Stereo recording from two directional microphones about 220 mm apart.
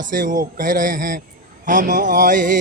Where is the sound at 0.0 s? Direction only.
35° right (ahead or behind).